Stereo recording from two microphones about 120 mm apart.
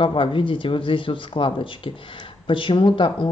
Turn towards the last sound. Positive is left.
turn(degrees=45)  # may be behind; listen again after turning